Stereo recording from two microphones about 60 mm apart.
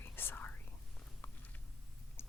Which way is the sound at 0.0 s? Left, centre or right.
Left.